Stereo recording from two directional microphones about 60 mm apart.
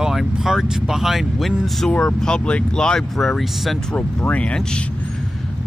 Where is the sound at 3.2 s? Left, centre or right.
Centre.